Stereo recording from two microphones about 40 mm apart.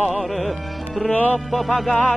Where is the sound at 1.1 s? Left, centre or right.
Left.